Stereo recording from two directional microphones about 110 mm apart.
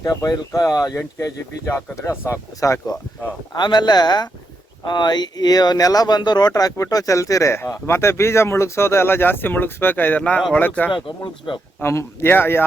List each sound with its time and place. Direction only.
0.0 s speech: 35° left (ahead or behind)
3.5 s speech: 40° left (ahead or behind); by 10.8 s 15° left (ahead or behind)
10.9 s speech: 50° left (ahead or behind)
11.8 s speech: 25° left (ahead or behind)